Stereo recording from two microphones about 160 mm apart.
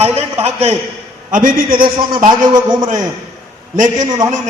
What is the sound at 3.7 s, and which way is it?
Speech, 50° right (ahead or behind).